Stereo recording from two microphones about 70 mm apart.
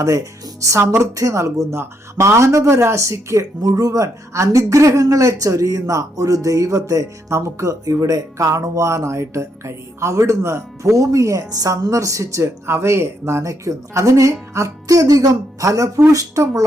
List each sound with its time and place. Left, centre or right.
0.0 s speech: right
3.6 s a woman's voice: right